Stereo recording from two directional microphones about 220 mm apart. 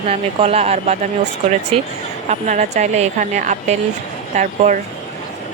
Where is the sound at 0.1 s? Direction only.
25° right (ahead or behind).